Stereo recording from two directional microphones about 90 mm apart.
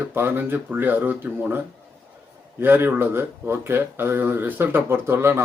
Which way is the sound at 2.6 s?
25° right (ahead or behind).